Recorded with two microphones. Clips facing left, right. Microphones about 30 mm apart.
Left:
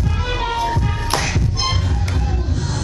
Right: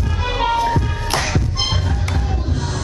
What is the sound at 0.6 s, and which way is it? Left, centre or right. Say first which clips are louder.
Music: right 1 dB; centre.